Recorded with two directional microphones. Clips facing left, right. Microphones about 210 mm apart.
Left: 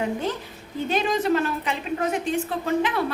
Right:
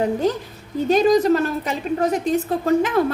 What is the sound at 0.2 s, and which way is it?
A woman's voice, 40° right (ahead or behind).